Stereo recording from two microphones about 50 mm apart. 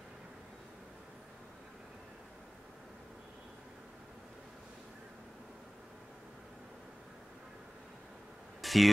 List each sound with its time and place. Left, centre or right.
8.5 s bee: centre